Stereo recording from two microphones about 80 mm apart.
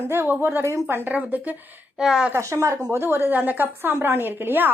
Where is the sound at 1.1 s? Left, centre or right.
Centre.